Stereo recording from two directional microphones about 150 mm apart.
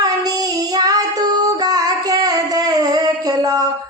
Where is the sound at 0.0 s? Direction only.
25° right (ahead or behind).